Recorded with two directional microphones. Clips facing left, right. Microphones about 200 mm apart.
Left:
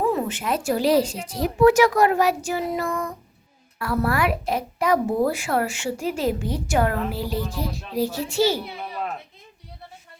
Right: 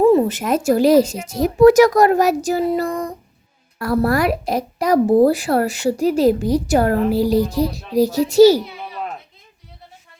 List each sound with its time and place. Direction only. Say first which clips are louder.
0.3 s a woman's voice: right 7 dB; 40° right (ahead or behind)